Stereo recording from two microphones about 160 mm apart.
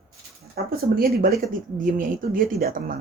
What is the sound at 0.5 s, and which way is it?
A woman's voice, 65° right (ahead or behind).